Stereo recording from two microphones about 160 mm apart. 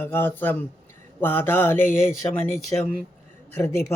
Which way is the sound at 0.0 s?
15° left (ahead or behind).